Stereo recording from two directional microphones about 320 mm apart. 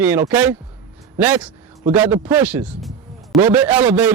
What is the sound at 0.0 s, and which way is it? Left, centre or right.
A man's voice, centre.